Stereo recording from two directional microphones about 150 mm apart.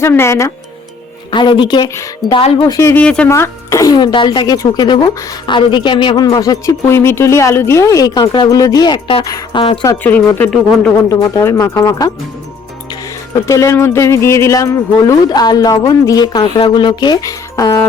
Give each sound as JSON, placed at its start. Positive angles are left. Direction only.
{"t": 0.0, "sound": "speech", "side_deg": 15}
{"t": 1.3, "sound": "a woman's voice", "side_deg": 30}
{"t": 3.0, "sound": "speech", "side_deg": 5}
{"t": 3.2, "sound": "a woman's voice", "side_deg": 20}
{"t": 9.8, "sound": "speech", "side_deg": 15}
{"t": 10.5, "sound": "speech", "side_deg": 0}
{"t": 11.1, "sound": "a woman's voice", "side_deg": 20}